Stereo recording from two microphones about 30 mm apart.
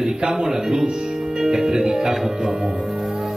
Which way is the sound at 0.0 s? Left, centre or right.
Centre.